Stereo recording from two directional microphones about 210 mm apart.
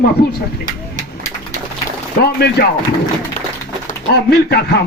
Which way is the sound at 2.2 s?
50° left (ahead or behind).